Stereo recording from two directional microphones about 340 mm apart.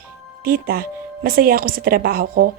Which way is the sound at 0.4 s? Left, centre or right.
Right.